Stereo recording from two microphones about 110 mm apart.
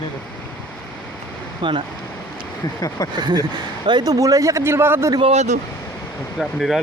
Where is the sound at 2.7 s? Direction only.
35° left (ahead or behind).